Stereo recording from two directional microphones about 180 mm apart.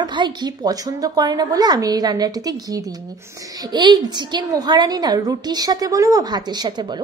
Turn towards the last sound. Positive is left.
turn(degrees=-25)  # may be behind; listen again after turning